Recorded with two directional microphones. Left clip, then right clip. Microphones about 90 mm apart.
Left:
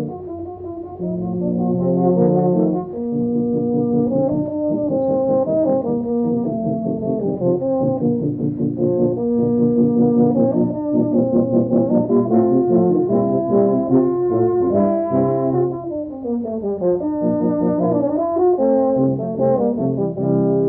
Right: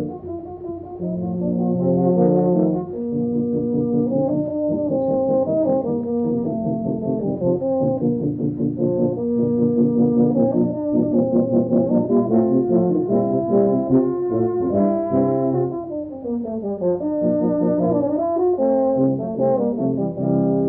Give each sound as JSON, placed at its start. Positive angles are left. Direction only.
{"t": 1.6, "sound": "brass instrument", "side_deg": -30}
{"t": 3.9, "sound": "brass instrument", "side_deg": -25}
{"t": 7.4, "sound": "brass instrument", "side_deg": -25}
{"t": 16.8, "sound": "brass instrument", "side_deg": -30}